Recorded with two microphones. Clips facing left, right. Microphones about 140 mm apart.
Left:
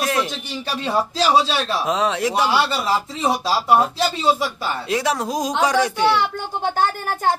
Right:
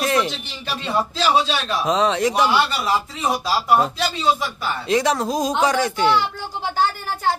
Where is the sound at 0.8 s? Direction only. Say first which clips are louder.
Left 1 dB; 40° left (ahead or behind).